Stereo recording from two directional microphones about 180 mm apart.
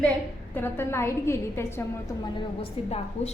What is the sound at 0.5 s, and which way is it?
A woman's voice, 10° left (ahead or behind).